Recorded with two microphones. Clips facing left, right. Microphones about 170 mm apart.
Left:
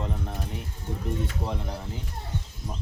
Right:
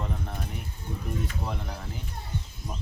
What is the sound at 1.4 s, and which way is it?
Speech, 25° left (ahead or behind).